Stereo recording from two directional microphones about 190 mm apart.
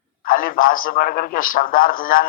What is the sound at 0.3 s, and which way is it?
A man's voice, 50° left (ahead or behind).